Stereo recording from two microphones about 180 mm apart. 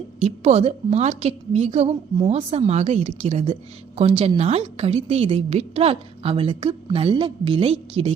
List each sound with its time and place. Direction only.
0.2 s a woman's voice: 35° right (ahead or behind)